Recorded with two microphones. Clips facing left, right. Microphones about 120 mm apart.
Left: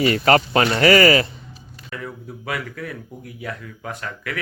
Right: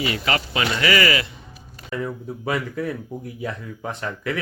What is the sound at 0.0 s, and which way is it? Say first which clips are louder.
Speech: left 8 dB; 45° left (ahead or behind).